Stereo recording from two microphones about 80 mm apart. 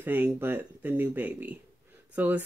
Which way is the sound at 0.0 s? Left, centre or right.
Right.